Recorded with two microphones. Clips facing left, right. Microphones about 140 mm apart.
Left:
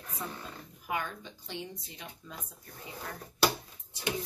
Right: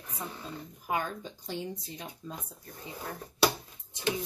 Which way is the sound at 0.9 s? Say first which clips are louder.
Right 3 dB; 35° right (ahead or behind).